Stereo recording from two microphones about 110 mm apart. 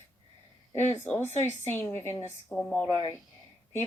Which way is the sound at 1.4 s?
20° left (ahead or behind).